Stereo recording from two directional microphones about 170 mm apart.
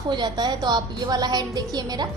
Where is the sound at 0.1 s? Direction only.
25° right (ahead or behind).